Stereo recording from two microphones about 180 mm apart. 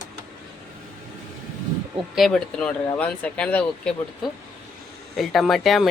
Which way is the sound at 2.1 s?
Centre (ahead or behind).